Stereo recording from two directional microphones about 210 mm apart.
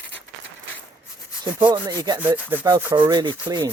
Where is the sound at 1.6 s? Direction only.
20° right (ahead or behind).